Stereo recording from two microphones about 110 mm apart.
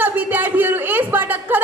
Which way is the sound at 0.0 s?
15° right (ahead or behind).